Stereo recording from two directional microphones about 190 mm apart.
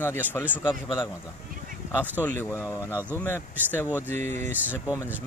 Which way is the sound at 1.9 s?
10° right (ahead or behind).